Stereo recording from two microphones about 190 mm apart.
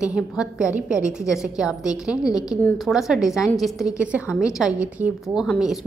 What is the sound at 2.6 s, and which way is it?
A woman's voice, centre (ahead or behind).